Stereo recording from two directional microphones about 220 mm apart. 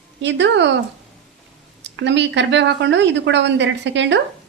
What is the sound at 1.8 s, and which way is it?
A woman's voice, 55° right (ahead or behind).